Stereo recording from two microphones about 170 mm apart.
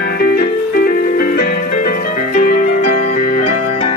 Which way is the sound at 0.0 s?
65° left (ahead or behind).